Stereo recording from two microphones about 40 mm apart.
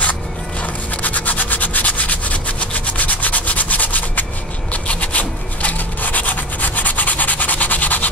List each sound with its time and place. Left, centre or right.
0.6 s rub: left